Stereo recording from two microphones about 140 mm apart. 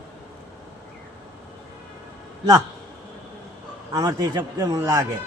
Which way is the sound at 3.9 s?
25° right (ahead or behind).